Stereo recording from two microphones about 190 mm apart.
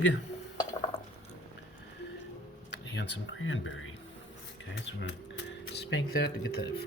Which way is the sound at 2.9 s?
75° left (ahead or behind).